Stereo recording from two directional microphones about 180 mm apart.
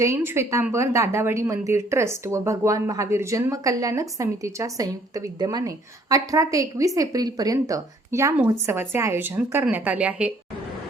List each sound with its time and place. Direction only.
0.0 s a woman's voice: 15° right (ahead or behind)